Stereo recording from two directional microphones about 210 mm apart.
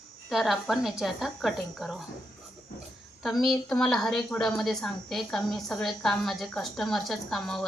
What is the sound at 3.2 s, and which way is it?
A woman's voice, centre (ahead or behind).